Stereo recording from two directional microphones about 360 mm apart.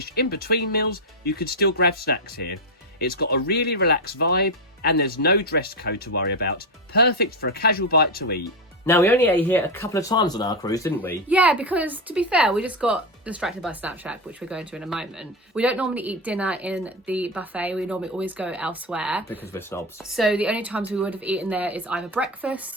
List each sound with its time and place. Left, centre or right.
0.0 s speech: left
8.9 s speech: centre